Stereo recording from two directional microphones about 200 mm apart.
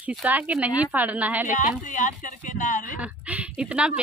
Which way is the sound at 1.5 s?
40° left (ahead or behind).